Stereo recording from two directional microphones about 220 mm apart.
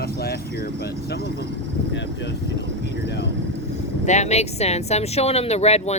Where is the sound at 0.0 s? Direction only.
45° left (ahead or behind).